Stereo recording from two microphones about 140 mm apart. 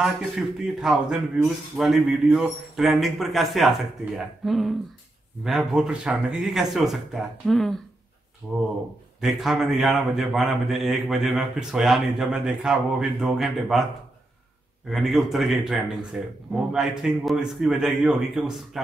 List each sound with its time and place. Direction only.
0.0 s speech: 5° right (ahead or behind)
9.2 s speech: centre (ahead or behind)
14.9 s speech: centre (ahead or behind)